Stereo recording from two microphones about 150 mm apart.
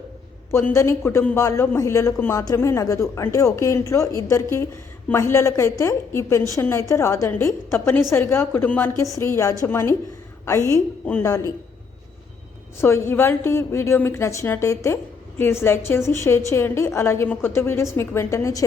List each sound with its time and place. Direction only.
0.5 s a man's voice: 20° left (ahead or behind)
11.0 s a man's voice: 15° left (ahead or behind)
12.8 s a woman's voice: 15° left (ahead or behind)